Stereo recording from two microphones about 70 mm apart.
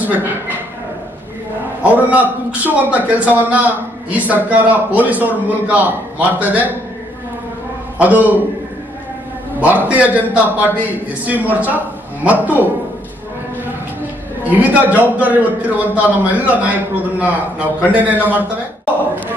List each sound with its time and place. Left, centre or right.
0.1 s speech: right
1.8 s a man's voice: right
7.9 s a man's voice: right
9.6 s a man's voice: right
14.4 s a man's voice: right